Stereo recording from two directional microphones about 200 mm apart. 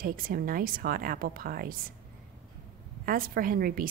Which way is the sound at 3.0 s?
45° right (ahead or behind).